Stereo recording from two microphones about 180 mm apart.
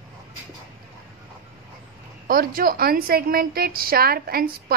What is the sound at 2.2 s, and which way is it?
A woman's voice, 55° right (ahead or behind).